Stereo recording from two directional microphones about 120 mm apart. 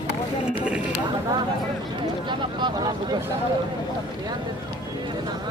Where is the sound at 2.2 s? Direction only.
35° right (ahead or behind).